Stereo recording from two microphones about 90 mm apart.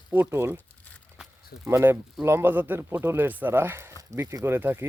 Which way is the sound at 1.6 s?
30° right (ahead or behind).